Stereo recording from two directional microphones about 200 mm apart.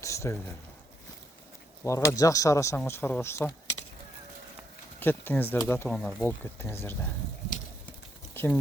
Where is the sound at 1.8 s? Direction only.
15° left (ahead or behind).